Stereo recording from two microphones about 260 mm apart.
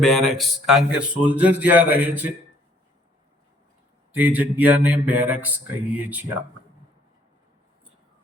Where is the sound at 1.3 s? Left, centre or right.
Centre.